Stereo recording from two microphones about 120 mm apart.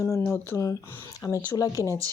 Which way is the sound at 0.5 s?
25° left (ahead or behind).